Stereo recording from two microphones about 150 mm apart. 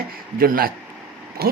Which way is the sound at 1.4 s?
90° right.